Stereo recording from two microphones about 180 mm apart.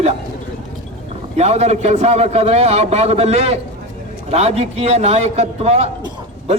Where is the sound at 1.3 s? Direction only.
35° right (ahead or behind).